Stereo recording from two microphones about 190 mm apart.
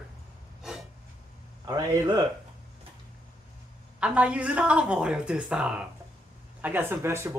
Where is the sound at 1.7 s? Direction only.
20° right (ahead or behind).